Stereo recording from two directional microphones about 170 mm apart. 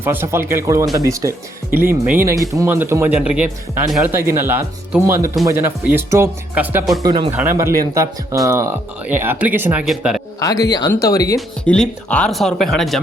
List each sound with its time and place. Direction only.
0.0 s speech: 15° right (ahead or behind)
7.0 s speech: 30° right (ahead or behind)
7.3 s speech: 15° right (ahead or behind)
10.4 s speech: 20° left (ahead or behind)
11.3 s speech: 5° left (ahead or behind)